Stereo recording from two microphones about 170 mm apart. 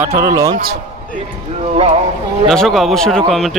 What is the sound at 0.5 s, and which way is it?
Speech, 60° right (ahead or behind).